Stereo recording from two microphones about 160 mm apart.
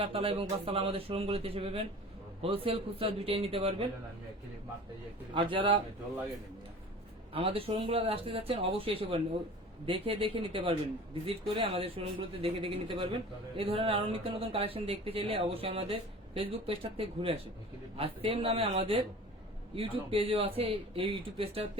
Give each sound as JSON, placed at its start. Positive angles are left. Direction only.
{"t": 0.0, "sound": "speech", "side_deg": -35}
{"t": 5.3, "sound": "speech", "side_deg": -30}
{"t": 7.3, "sound": "speech", "side_deg": -35}